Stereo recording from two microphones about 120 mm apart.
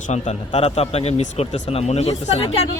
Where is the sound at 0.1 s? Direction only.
60° left (ahead or behind).